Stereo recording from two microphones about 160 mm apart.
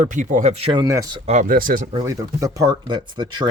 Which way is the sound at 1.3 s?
55° right (ahead or behind).